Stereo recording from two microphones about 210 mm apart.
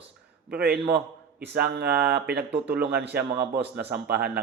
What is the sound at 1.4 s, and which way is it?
A man's voice, 50° right (ahead or behind).